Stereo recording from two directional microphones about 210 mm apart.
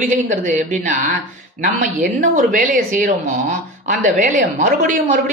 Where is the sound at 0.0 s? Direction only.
35° right (ahead or behind).